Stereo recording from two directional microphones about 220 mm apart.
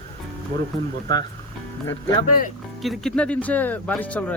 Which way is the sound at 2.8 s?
Centre (ahead or behind).